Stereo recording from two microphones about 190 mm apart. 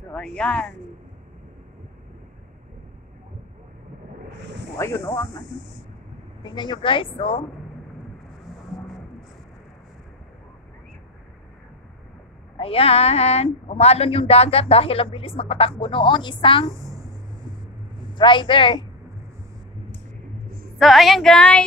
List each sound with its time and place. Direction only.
0.1 s speech: 5° left (ahead or behind)
4.7 s speech: 15° left (ahead or behind)
6.4 s a woman's voice: 25° left (ahead or behind)
12.5 s a woman's voice: 30° left (ahead or behind)
18.1 s a woman's voice: 25° left (ahead or behind)
20.8 s speech: centre (ahead or behind)